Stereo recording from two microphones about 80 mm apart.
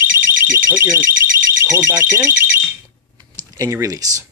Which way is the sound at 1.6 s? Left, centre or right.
Right.